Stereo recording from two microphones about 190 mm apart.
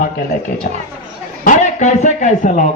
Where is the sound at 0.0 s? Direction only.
50° left (ahead or behind).